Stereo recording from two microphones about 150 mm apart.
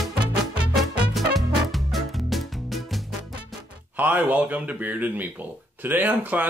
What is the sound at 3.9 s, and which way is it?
A man's voice, 10° right (ahead or behind).